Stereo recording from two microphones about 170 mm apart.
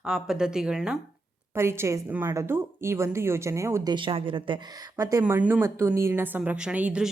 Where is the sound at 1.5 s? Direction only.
15° right (ahead or behind).